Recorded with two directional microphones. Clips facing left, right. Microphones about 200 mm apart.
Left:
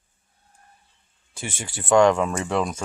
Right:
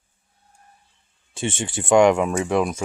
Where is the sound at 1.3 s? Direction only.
25° right (ahead or behind).